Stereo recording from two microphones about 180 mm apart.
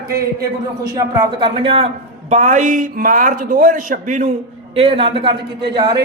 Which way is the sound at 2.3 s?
40° right (ahead or behind).